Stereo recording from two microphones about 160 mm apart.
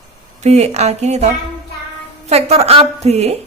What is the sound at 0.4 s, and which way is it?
A woman's voice, 45° right (ahead or behind).